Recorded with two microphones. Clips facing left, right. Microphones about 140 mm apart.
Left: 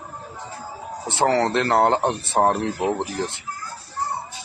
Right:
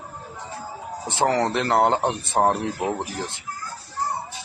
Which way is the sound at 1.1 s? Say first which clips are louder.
Left 2 dB; 15° right (ahead or behind).